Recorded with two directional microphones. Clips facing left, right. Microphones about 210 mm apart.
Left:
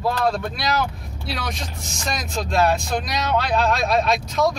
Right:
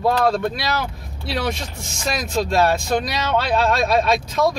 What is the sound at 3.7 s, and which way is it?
Speech, centre (ahead or behind).